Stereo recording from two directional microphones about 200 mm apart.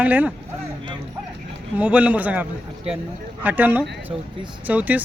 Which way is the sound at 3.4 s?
10° right (ahead or behind).